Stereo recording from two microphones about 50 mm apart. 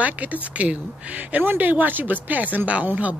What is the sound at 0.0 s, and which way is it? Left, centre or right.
A woman's voice, right.